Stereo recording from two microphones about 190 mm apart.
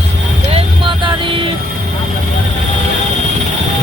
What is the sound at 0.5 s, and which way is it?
Vehicle, 25° right (ahead or behind).